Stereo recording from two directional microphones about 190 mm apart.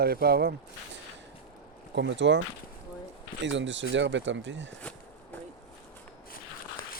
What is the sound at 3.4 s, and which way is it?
Speech, 75° right (ahead or behind).